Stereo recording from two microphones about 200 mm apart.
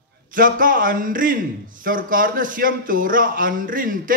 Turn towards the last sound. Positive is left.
turn(degrees=-45)  # may be behind; listen again after turning